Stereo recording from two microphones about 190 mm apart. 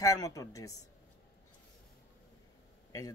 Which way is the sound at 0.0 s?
20° left (ahead or behind).